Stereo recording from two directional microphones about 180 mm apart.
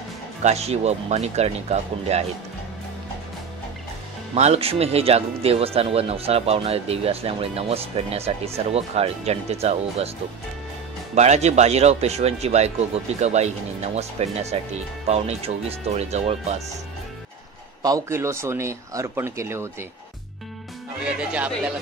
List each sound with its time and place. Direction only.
0.4 s speech: 35° right (ahead or behind)
4.4 s speech: 35° right (ahead or behind)
11.1 s speech: 40° right (ahead or behind)
17.8 s speech: 15° right (ahead or behind)
21.0 s speech: 5° right (ahead or behind)